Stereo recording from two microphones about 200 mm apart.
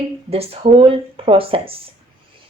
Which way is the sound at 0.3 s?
30° right (ahead or behind).